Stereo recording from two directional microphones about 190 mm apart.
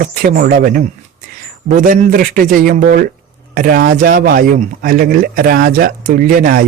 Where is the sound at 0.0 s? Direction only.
50° right (ahead or behind).